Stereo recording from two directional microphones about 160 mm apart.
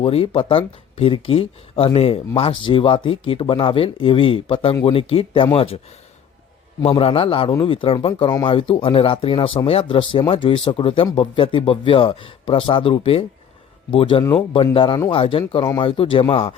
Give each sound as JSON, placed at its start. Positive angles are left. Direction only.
{"t": 0.0, "sound": "speech", "side_deg": 35}
{"t": 6.8, "sound": "speech", "side_deg": 35}